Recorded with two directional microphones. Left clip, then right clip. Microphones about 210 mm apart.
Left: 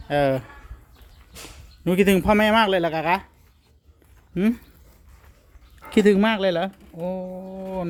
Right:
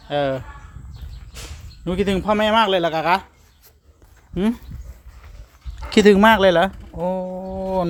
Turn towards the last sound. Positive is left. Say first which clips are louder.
# right 8 dB
turn(degrees=-20)  # may be behind; listen again after turning